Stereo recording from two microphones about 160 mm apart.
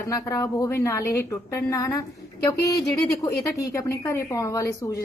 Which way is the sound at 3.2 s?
20° left (ahead or behind).